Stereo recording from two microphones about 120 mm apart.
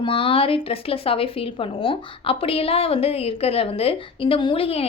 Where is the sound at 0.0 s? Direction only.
50° left (ahead or behind).